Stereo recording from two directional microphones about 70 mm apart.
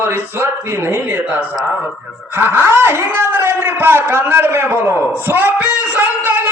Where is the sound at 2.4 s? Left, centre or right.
Right.